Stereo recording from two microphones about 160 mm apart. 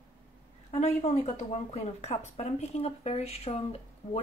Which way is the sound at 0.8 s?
45° left (ahead or behind).